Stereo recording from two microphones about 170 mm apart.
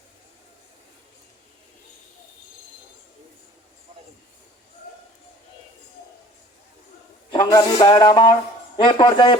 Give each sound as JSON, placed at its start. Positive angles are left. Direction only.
{"t": 7.3, "sound": "a man's voice", "side_deg": 25}